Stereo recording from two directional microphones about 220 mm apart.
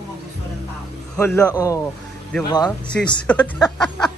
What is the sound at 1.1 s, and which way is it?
Speech, 10° left (ahead or behind).